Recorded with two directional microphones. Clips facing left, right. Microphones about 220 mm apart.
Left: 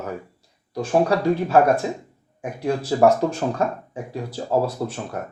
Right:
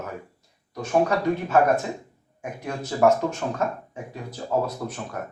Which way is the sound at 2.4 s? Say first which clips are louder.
Left 7 dB; 35° left (ahead or behind).